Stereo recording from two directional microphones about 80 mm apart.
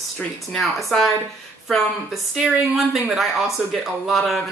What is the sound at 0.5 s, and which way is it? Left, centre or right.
Speech, centre.